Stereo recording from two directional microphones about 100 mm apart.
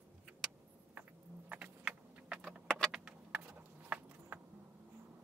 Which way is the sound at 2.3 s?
Centre (ahead or behind).